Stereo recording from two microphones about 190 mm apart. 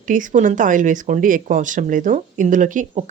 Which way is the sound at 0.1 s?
45° right (ahead or behind).